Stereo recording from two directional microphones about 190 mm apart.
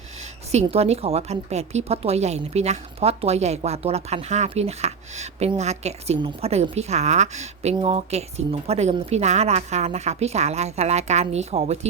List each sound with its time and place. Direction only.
0.5 s a woman's voice: 35° right (ahead or behind)